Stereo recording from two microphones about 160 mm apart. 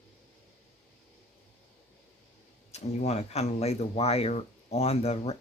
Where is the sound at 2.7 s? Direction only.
45° left (ahead or behind).